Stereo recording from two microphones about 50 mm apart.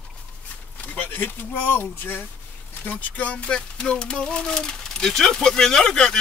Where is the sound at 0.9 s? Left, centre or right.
Left.